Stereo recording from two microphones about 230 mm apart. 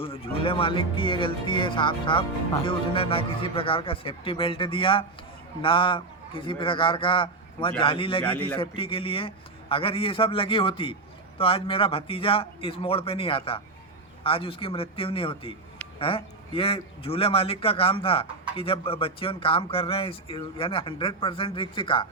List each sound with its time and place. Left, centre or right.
0.0 s a man's voice: left
8.2 s a man's voice: centre
8.5 s a man's voice: left